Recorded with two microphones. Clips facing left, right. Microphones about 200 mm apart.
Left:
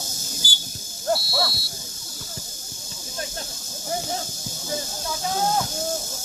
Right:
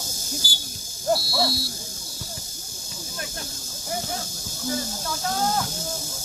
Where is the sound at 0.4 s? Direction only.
5° right (ahead or behind).